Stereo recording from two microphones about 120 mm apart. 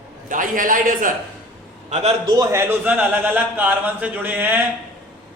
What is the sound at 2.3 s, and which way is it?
Speech, 30° right (ahead or behind).